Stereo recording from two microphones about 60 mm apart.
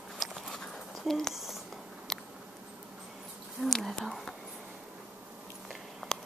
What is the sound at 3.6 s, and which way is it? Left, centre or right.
Whispering, centre.